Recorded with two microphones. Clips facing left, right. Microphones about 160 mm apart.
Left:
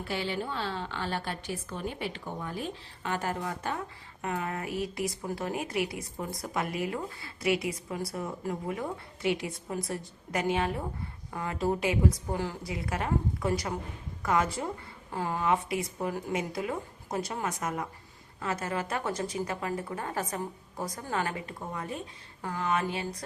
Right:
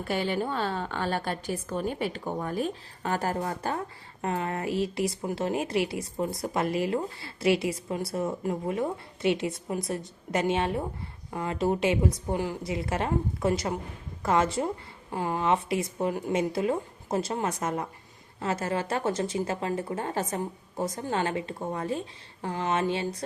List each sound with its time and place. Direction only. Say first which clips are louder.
0.1 s a woman's voice: right 5 dB; 50° right (ahead or behind); by 23.2 s 25° right (ahead or behind)